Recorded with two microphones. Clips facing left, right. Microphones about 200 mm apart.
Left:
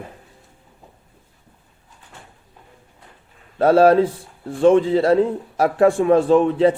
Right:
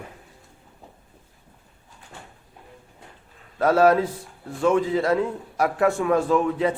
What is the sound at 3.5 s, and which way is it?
A man's voice, 30° left (ahead or behind).